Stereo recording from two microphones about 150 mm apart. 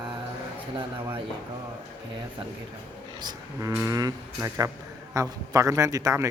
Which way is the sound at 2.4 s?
35° right (ahead or behind).